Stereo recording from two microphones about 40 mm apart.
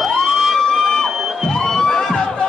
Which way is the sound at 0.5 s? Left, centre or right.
Centre.